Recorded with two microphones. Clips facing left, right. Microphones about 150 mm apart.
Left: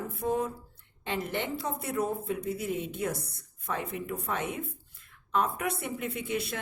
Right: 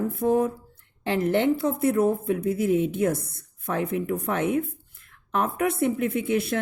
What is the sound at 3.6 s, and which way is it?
A woman's voice, 60° right (ahead or behind).